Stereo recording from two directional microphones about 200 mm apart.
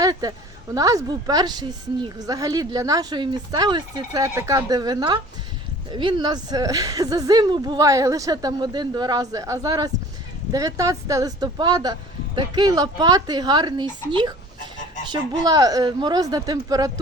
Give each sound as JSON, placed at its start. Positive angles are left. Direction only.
{"t": 0.0, "sound": "speech", "side_deg": -20}